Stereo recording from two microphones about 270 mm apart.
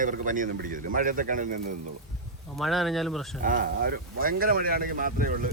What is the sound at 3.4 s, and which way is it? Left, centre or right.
A man's voice, right.